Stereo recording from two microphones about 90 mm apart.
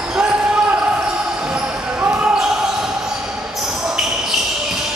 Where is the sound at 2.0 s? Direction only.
15° right (ahead or behind).